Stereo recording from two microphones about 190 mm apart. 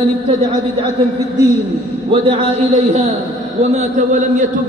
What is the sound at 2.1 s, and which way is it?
Speech, 30° right (ahead or behind).